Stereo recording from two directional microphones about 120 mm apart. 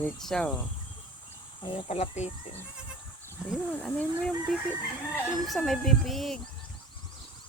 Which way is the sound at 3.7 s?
10° left (ahead or behind).